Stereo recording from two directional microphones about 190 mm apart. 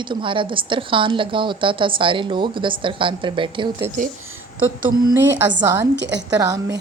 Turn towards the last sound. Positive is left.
turn(degrees=-20)  # may be behind; listen again after turning